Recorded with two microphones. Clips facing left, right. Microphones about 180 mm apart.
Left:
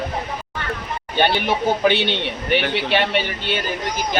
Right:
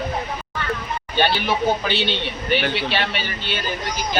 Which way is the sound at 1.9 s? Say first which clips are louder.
Left 2 dB; 20° left (ahead or behind).